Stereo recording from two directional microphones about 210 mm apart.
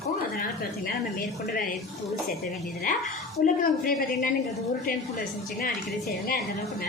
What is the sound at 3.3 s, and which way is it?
Speech, 40° left (ahead or behind).